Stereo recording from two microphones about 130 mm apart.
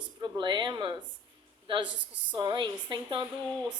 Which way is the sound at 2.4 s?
35° right (ahead or behind).